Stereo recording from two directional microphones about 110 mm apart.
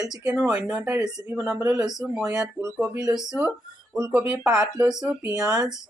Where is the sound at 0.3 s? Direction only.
10° right (ahead or behind).